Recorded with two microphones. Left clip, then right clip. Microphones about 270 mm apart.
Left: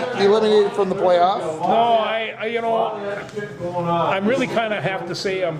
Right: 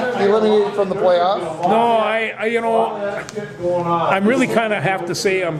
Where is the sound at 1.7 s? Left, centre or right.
Right.